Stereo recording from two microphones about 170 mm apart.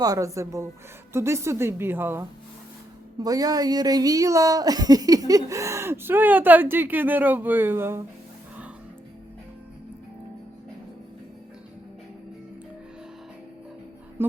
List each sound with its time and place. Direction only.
0.0 s speech: 20° right (ahead or behind)
3.2 s speech: 20° right (ahead or behind)
14.2 s speech: 15° right (ahead or behind)